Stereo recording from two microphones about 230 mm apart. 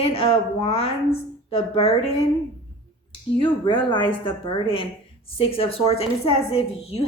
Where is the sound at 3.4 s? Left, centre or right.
Left.